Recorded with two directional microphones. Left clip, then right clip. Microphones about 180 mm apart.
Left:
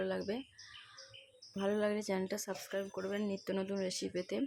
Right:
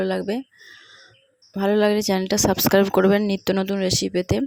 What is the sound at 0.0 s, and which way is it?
Speech, 45° right (ahead or behind).